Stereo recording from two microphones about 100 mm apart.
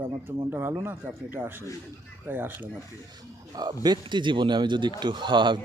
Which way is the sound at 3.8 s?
45° right (ahead or behind).